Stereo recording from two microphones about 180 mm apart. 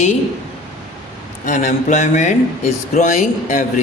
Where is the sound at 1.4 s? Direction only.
45° left (ahead or behind).